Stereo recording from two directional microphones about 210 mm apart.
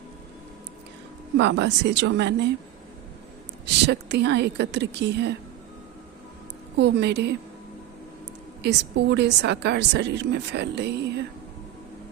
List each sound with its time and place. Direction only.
1.4 s a woman's voice: 55° right (ahead or behind)
3.8 s a woman's voice: 55° right (ahead or behind)
6.7 s a woman's voice: 55° right (ahead or behind)
8.6 s a woman's voice: 55° right (ahead or behind)